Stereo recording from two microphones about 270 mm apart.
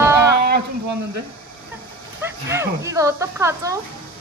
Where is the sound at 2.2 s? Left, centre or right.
Centre.